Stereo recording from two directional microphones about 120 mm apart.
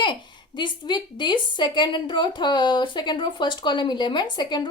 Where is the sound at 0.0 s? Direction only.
40° left (ahead or behind).